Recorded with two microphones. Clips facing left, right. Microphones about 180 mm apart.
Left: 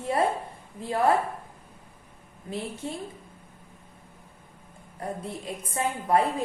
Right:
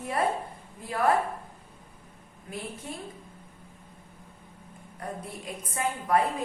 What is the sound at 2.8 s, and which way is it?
Speech, 25° left (ahead or behind).